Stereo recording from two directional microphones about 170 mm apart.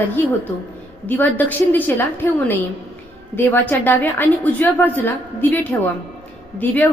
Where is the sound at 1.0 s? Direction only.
10° left (ahead or behind).